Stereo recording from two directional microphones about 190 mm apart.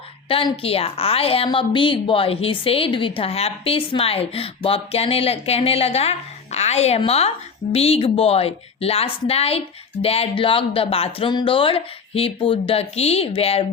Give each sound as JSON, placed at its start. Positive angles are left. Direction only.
{"t": 0.3, "sound": "a woman's voice", "side_deg": 30}